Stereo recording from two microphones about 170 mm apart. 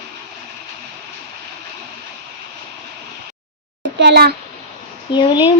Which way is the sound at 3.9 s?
70° right (ahead or behind).